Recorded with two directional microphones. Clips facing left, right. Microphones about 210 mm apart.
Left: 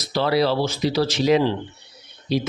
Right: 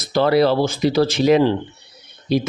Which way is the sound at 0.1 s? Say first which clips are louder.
Right 5 dB; 50° right (ahead or behind).